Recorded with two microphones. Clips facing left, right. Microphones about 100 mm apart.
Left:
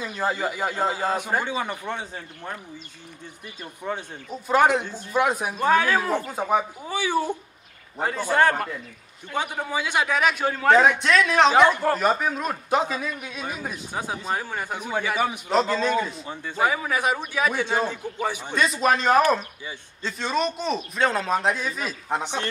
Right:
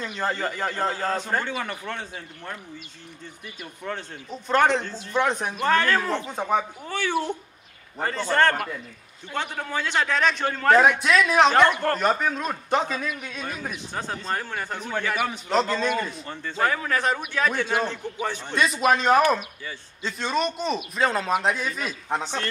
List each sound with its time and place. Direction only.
0.0 s a man's voice: 5° left (ahead or behind)
3.8 s a man's voice: 10° left (ahead or behind)
18.6 s a man's voice: centre (ahead or behind)
22.2 s a man's voice: 15° left (ahead or behind)